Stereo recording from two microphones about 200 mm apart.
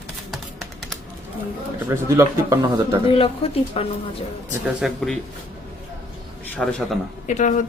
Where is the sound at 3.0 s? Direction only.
25° left (ahead or behind).